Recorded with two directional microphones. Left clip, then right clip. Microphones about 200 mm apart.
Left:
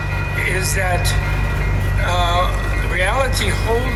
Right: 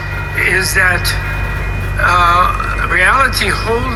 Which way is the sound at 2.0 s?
10° right (ahead or behind).